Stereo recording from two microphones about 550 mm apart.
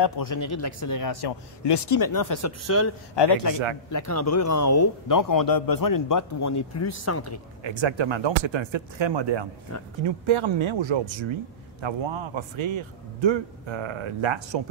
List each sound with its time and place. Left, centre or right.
0.0 s a man's voice: left
3.2 s a man's voice: left
3.9 s a man's voice: left
7.6 s speech: right